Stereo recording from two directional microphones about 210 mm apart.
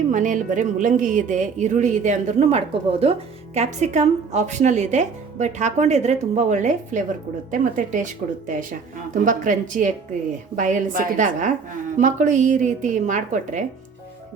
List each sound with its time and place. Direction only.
0.1 s speech: 35° right (ahead or behind)